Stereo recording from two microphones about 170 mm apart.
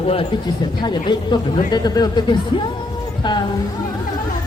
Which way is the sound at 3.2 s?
25° left (ahead or behind).